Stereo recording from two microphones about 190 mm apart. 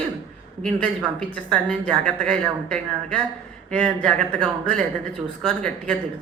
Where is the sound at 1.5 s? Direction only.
5° left (ahead or behind).